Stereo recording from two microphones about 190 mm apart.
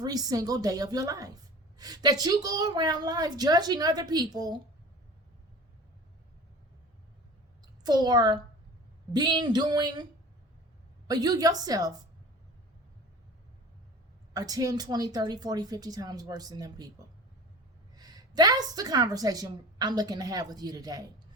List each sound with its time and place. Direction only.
0.0 s a woman's voice: 20° right (ahead or behind)
7.9 s a woman's voice: 20° right (ahead or behind)
11.1 s a woman's voice: 20° right (ahead or behind)
14.3 s a woman's voice: 20° right (ahead or behind)
17.9 s a woman's voice: 20° right (ahead or behind)